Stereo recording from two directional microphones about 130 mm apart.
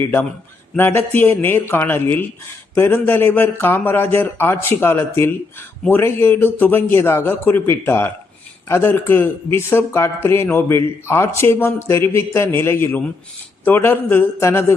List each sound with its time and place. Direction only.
0.0 s a man's voice: 15° left (ahead or behind)